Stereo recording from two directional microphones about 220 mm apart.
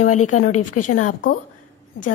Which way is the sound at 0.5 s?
90° left.